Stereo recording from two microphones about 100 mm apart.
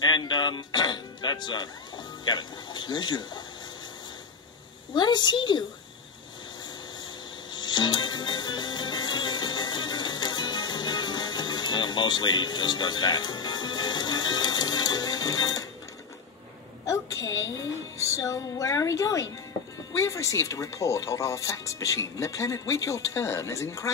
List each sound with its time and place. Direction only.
0.0 s speech: 45° left (ahead or behind)
4.9 s a woman's voice: 45° left (ahead or behind)
7.5 s music: 50° left (ahead or behind)
16.8 s a sound: 30° left (ahead or behind)
17.9 s speech: 30° left (ahead or behind)